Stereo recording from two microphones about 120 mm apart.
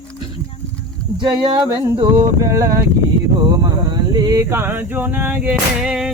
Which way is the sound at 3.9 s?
35° right (ahead or behind).